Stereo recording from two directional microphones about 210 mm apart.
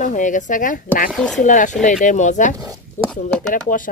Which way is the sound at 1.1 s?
Centre (ahead or behind).